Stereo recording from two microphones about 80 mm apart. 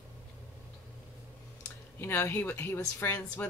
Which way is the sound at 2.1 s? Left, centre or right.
Left.